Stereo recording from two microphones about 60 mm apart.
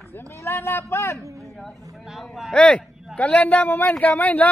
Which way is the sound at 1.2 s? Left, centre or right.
Right.